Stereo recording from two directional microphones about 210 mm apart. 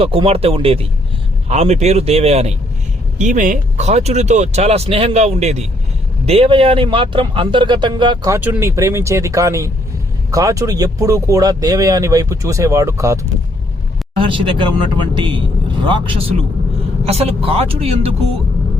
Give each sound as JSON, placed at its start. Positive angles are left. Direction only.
{"t": 0.0, "sound": "speech", "side_deg": -25}
{"t": 14.2, "sound": "speech", "side_deg": -25}